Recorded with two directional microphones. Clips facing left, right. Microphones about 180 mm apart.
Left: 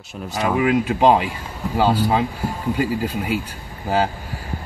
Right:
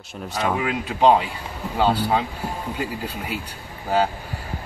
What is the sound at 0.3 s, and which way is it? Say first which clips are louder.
Speech: left 5 dB; centre (ahead or behind).